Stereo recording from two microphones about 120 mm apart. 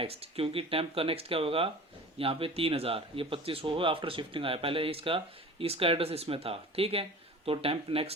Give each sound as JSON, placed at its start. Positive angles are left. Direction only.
{"t": 0.0, "sound": "speech", "side_deg": -55}